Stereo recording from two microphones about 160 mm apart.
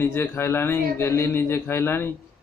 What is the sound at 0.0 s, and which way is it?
Speech, 15° left (ahead or behind).